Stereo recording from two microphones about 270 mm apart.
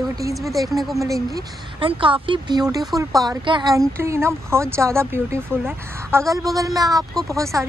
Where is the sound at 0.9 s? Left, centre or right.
Centre.